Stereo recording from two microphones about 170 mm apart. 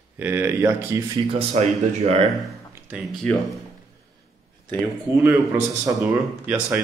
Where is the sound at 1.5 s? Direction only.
40° right (ahead or behind).